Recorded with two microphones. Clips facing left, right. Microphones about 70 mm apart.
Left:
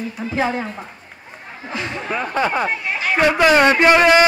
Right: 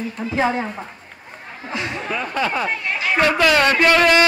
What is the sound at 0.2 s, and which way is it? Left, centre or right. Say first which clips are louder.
Speech: right 1 dB; centre.